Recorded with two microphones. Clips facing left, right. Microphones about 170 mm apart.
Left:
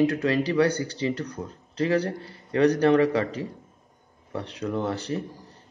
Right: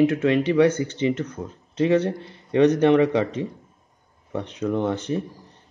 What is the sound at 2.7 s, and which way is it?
Speech, 25° right (ahead or behind).